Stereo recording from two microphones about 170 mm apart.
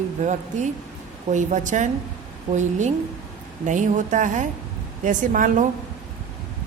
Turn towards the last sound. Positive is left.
turn(degrees=-50)  # may be behind; listen again after turning